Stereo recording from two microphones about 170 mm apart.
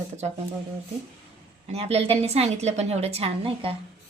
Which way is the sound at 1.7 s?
35° right (ahead or behind).